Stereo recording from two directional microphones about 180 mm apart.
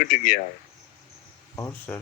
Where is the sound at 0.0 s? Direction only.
50° left (ahead or behind).